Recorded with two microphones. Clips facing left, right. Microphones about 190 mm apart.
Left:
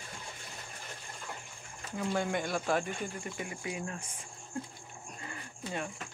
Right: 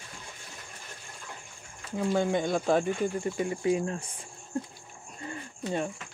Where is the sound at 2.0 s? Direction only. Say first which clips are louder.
Right 6 dB; 20° right (ahead or behind).